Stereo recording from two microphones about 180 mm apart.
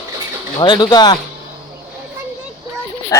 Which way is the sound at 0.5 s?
25° left (ahead or behind).